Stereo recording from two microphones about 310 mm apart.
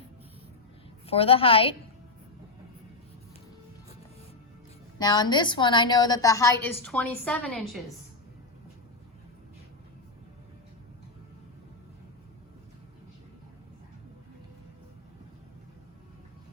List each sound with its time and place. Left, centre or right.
1.0 s a woman's voice: centre
4.9 s a woman's voice: centre